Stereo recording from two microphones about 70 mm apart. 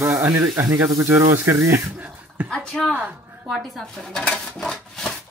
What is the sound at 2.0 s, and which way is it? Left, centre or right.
Speech, centre.